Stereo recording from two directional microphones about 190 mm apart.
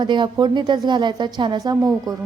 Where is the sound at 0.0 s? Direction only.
25° right (ahead or behind).